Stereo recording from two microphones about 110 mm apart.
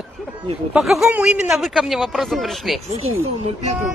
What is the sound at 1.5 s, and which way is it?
Speech, centre (ahead or behind).